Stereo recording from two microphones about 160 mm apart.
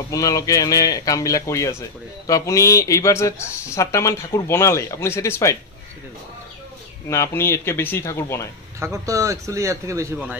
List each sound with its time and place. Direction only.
0.1 s speech: 20° left (ahead or behind)
7.1 s speech: 15° left (ahead or behind)
8.7 s a man's voice: 20° right (ahead or behind)